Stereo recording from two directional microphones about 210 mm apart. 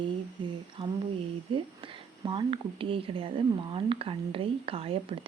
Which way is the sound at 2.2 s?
25° right (ahead or behind).